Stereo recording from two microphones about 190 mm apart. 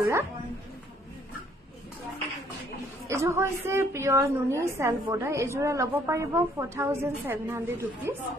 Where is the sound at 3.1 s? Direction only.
15° right (ahead or behind).